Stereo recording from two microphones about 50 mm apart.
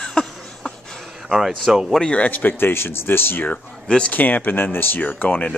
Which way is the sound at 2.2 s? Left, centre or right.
Left.